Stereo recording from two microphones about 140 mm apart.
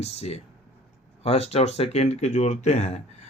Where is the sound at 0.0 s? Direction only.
50° left (ahead or behind).